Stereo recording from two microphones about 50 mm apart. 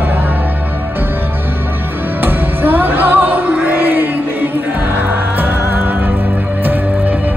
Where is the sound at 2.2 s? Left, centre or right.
Right.